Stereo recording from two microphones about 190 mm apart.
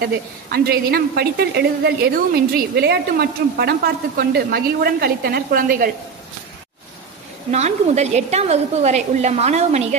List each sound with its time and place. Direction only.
0.5 s a woman's voice: 55° right (ahead or behind)
7.5 s a woman's voice: 35° right (ahead or behind)